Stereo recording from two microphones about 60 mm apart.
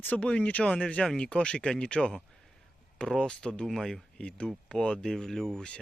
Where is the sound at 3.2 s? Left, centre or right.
Centre.